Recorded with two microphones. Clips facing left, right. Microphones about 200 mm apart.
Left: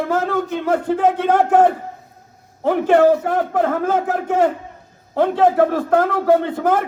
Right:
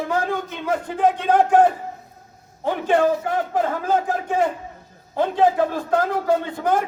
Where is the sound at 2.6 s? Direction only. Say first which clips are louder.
Left 6 dB; 60° left (ahead or behind).